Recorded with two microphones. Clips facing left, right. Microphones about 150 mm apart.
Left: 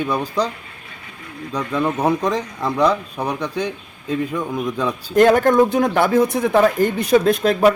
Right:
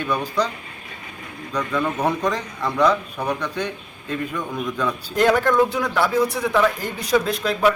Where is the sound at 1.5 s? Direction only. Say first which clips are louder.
Left 2 dB; 30° left (ahead or behind).